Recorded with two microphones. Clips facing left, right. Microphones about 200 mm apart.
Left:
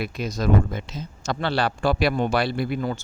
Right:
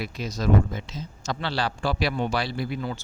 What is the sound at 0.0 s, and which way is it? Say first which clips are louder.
Speech: left 3 dB; 55° left (ahead or behind).